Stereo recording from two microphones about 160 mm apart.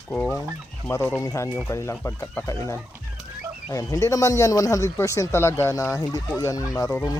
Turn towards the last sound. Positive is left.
turn(degrees=20)  # may be behind; listen again after turning